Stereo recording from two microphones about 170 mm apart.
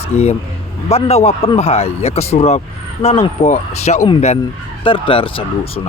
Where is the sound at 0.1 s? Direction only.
45° left (ahead or behind).